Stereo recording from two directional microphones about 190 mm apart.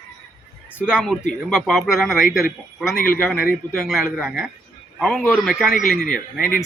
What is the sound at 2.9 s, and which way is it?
Speech, 50° left (ahead or behind).